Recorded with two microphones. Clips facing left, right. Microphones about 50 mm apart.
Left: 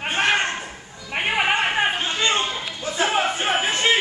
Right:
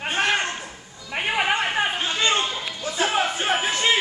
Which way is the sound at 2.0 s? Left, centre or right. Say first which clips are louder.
Even; centre.